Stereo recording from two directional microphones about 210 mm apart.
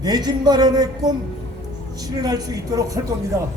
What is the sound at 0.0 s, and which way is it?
Speech, 20° right (ahead or behind).